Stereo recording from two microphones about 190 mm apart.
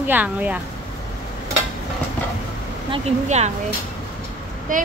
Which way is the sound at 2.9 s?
35° right (ahead or behind).